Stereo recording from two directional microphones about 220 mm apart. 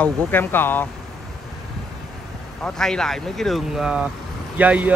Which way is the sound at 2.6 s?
5° left (ahead or behind).